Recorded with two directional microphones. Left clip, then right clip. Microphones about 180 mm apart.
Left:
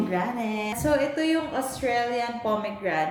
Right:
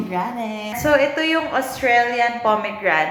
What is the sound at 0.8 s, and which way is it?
A woman's voice, 45° left (ahead or behind).